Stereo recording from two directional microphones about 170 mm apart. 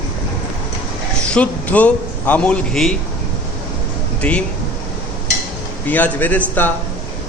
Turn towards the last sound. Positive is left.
turn(degrees=10)  # may be behind; listen again after turning